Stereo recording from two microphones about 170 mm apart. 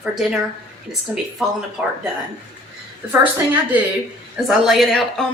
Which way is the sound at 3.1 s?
10° right (ahead or behind).